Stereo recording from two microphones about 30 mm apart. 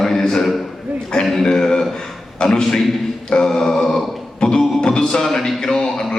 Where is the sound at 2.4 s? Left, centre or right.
Left.